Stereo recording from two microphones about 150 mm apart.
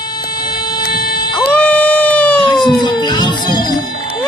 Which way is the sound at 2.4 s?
30° left (ahead or behind).